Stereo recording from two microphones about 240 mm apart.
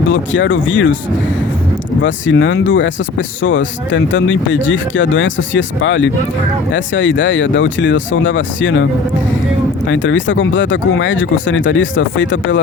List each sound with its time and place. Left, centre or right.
0.1 s speech: left
2.0 s speech: left